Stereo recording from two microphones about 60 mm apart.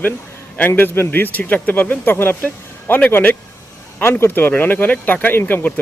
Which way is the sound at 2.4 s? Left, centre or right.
Left.